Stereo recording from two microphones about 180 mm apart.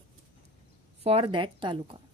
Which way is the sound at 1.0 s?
30° right (ahead or behind).